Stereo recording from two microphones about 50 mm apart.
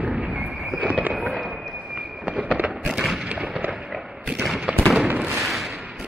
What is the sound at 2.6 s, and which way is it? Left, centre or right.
Fireworks, centre.